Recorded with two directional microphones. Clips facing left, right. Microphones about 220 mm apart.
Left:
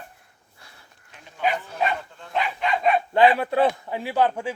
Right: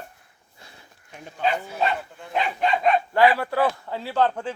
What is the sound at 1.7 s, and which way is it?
Bow-wow, 10° right (ahead or behind).